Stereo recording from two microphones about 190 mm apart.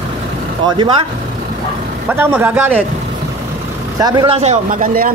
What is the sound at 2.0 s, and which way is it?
Speech, 10° right (ahead or behind).